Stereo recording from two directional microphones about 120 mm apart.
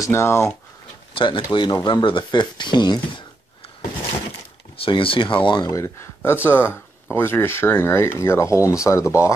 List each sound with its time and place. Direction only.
0.0 s speech: 20° left (ahead or behind)
1.1 s speech: 45° left (ahead or behind)
4.8 s speech: 50° left (ahead or behind)
5.7 s speech: 25° left (ahead or behind)